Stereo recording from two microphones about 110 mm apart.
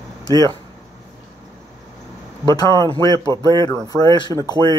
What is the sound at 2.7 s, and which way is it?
Speech, 35° right (ahead or behind).